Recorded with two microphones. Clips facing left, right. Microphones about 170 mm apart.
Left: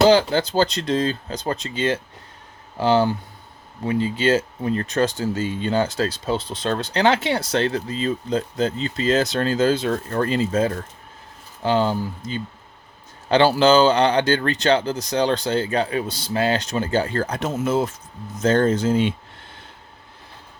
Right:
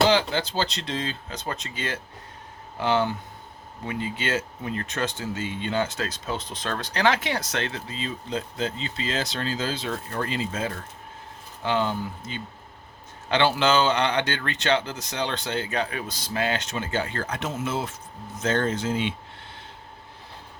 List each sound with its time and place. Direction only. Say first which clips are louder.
0.1 s speech: left 6 dB; 40° left (ahead or behind)